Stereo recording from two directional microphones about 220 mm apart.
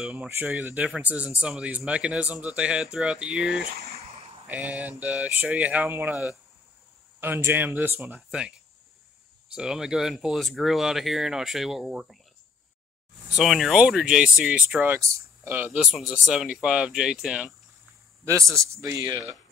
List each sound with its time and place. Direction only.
0.0 s speech: 5° right (ahead or behind)
13.4 s speech: centre (ahead or behind)
18.2 s speech: 15° right (ahead or behind)